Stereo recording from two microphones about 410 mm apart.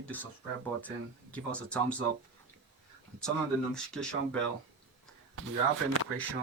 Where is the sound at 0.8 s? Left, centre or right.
Centre.